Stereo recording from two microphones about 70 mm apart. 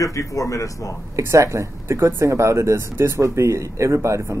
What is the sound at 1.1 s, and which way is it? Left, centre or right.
Speech, right.